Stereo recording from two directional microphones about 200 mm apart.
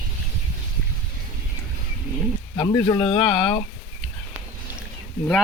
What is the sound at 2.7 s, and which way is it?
Speech, 20° left (ahead or behind).